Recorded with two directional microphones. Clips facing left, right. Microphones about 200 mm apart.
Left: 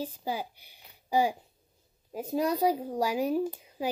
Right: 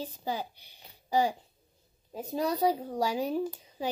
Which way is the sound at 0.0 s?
10° left (ahead or behind).